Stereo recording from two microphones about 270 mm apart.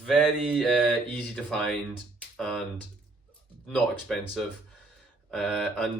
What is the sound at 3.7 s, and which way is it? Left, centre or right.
Speech, centre.